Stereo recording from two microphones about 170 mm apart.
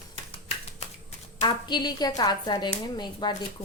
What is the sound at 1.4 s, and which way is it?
Speech, 25° left (ahead or behind).